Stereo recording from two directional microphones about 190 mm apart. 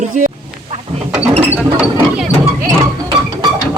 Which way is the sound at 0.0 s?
45° right (ahead or behind).